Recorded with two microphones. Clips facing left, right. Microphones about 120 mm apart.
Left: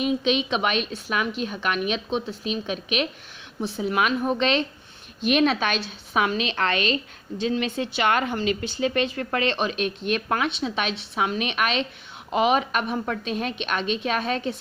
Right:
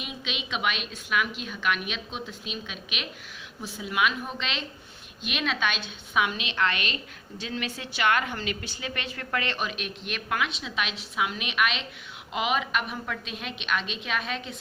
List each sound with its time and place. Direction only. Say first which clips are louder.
0.0 s speech: left 14 dB; 40° left (ahead or behind)